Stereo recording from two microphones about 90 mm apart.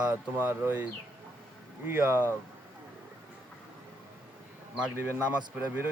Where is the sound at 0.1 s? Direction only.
25° right (ahead or behind).